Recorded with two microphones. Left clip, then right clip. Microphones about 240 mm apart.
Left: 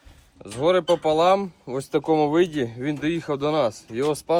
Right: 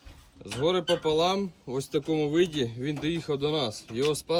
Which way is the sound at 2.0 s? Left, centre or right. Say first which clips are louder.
Left 11 dB; centre.